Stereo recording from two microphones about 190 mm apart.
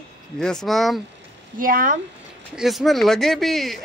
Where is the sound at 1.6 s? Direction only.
45° right (ahead or behind).